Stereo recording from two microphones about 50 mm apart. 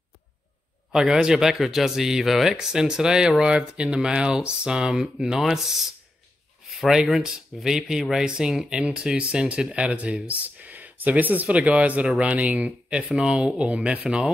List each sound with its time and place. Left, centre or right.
0.9 s speech: centre
6.7 s a sound: centre
7.0 s speech: centre
13.1 s speech: centre